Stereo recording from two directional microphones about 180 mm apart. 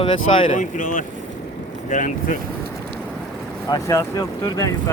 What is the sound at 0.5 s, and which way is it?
Speech, 45° left (ahead or behind).